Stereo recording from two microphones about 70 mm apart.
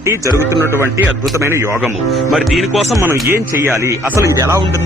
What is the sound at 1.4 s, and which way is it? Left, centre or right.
Speech, right.